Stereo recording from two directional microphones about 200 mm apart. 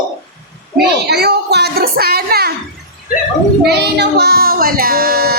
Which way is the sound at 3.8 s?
55° right (ahead or behind).